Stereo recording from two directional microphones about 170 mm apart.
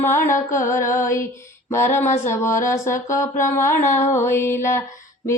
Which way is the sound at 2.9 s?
50° left (ahead or behind).